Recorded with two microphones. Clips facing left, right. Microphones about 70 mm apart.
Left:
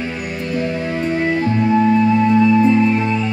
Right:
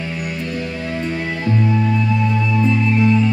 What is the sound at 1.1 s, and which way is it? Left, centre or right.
Music, left.